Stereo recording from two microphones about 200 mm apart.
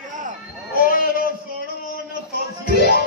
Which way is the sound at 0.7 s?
45° left (ahead or behind).